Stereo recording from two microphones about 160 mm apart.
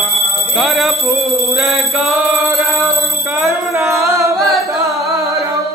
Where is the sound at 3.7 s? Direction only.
15° right (ahead or behind).